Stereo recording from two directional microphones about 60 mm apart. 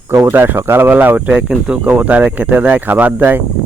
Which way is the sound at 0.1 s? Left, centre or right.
Right.